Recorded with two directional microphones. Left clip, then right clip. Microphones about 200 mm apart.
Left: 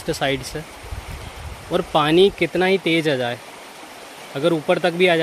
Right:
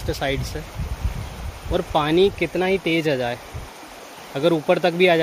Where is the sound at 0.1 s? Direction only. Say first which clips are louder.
Left 3 dB; 30° left (ahead or behind).